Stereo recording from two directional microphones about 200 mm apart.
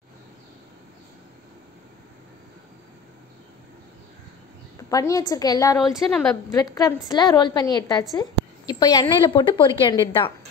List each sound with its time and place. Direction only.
4.7 s a woman's voice: 15° left (ahead or behind)
5.8 s a woman's voice: centre (ahead or behind)
6.5 s a woman's voice: 15° left (ahead or behind)